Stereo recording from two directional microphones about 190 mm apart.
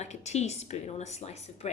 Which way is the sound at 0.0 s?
35° left (ahead or behind).